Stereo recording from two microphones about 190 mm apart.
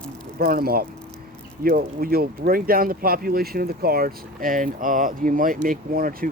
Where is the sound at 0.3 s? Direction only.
50° right (ahead or behind).